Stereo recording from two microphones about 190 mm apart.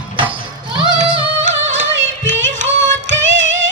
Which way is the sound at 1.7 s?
75° right (ahead or behind).